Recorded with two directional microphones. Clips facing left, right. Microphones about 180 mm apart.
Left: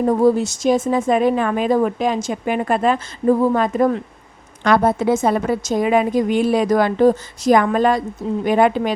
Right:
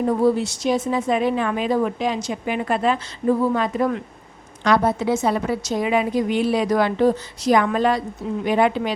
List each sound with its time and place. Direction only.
0.0 s a woman's voice: 45° left (ahead or behind)
4.6 s a woman's voice: 50° left (ahead or behind)